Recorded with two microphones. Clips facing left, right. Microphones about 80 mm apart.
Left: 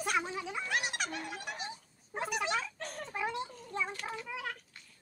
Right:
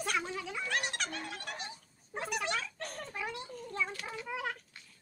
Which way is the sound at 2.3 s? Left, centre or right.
Centre.